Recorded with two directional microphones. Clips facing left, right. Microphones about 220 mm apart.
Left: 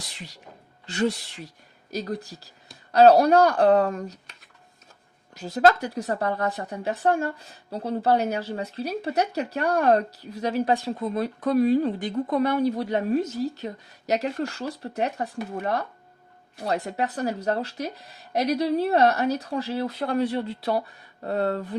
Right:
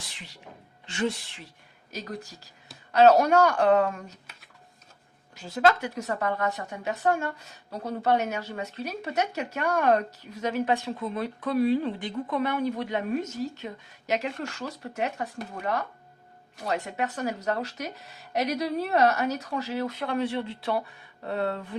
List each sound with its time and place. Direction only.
0.9 s a woman's voice: 40° left (ahead or behind)
5.3 s a woman's voice: 40° left (ahead or behind)
16.6 s a woman's voice: 35° left (ahead or behind)